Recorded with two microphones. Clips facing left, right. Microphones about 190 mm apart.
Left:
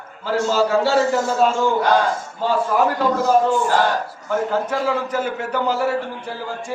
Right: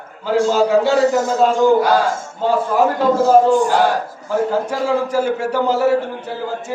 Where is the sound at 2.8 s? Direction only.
30° right (ahead or behind).